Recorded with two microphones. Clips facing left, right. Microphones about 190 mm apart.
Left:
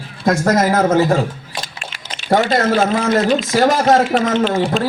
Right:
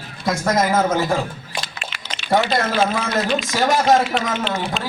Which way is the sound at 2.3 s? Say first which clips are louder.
Left 4 dB; 45° left (ahead or behind).